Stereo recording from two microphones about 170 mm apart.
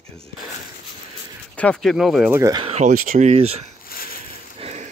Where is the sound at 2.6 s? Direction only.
40° right (ahead or behind).